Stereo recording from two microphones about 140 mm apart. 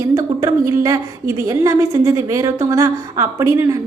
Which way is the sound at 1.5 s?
25° right (ahead or behind).